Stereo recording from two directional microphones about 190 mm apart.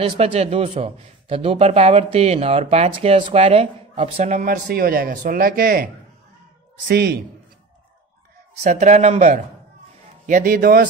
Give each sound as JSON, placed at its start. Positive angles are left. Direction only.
{"t": 0.0, "sound": "a man's voice", "side_deg": -30}
{"t": 6.9, "sound": "a man's voice", "side_deg": -55}
{"t": 8.6, "sound": "a man's voice", "side_deg": -40}